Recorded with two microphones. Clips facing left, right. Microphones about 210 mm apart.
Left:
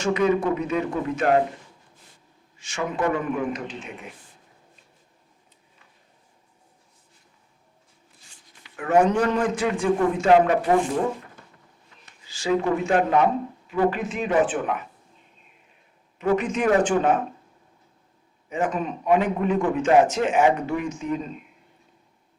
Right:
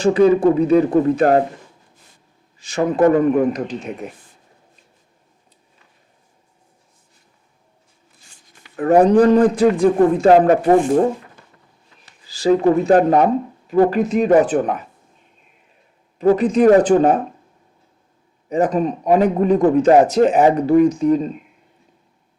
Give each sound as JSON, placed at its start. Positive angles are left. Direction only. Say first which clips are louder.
{"t": 0.0, "sound": "speech", "louder": "right 9 dB", "side_deg": -35}
{"t": 2.6, "sound": "speech", "louder": "right 10 dB", "side_deg": -35}
{"t": 8.2, "sound": "speech", "louder": "right 3 dB", "side_deg": -45}
{"t": 12.0, "sound": "speech", "louder": "right 9 dB", "side_deg": -35}
{"t": 16.1, "sound": "speech", "louder": "right 8 dB", "side_deg": -35}
{"t": 18.4, "sound": "speech", "louder": "right 8 dB", "side_deg": -35}